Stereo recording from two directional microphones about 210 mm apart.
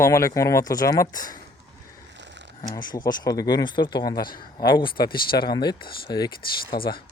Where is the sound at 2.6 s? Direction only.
20° left (ahead or behind).